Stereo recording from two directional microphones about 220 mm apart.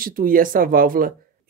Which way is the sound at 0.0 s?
40° right (ahead or behind).